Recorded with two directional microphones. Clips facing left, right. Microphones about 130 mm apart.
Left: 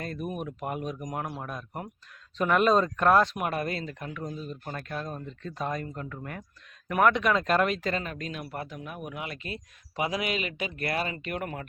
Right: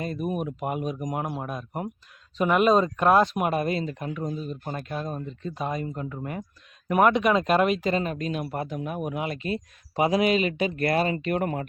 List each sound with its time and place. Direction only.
0.0 s speech: 15° right (ahead or behind); by 11.6 s 30° right (ahead or behind)